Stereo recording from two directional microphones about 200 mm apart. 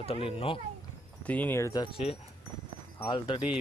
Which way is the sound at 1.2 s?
10° left (ahead or behind).